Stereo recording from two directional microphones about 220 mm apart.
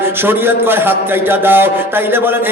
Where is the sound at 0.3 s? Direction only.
10° right (ahead or behind).